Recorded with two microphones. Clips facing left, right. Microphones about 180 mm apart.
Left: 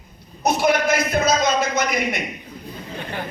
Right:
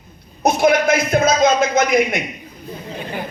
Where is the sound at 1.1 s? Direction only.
50° right (ahead or behind).